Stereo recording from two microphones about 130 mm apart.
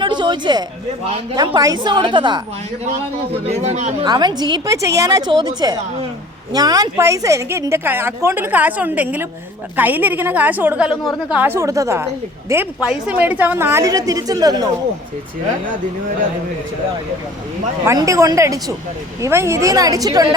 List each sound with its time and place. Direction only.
0.0 s a sound: 35° right (ahead or behind)
1.4 s speech: 30° right (ahead or behind)
3.5 s speech: 60° right (ahead or behind)
4.0 s a woman's voice: 30° right (ahead or behind)
12.8 s a woman's voice: 5° right (ahead or behind); by 14.7 s 30° right (ahead or behind)
17.8 s a woman's voice: 25° right (ahead or behind)